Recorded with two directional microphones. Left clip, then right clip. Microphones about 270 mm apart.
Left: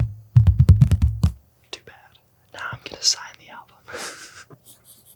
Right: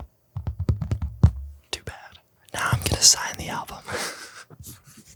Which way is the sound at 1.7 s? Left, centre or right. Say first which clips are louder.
Right 4 dB; right.